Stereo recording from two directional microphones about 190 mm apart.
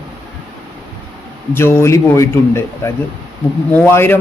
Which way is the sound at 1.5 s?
10° left (ahead or behind).